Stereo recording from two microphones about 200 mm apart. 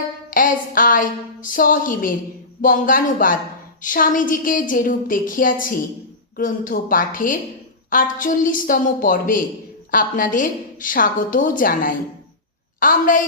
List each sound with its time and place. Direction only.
0.3 s a woman's voice: 45° left (ahead or behind)